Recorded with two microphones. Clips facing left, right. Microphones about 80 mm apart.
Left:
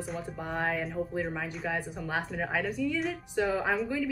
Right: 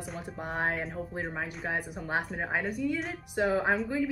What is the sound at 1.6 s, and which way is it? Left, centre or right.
Speech, centre.